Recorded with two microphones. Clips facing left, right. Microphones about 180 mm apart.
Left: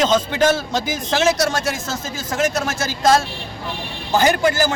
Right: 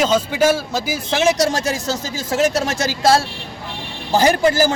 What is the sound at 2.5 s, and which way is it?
Speech, 30° right (ahead or behind).